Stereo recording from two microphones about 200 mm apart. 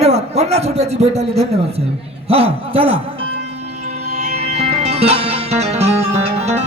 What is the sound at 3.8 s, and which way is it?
Music, 35° right (ahead or behind).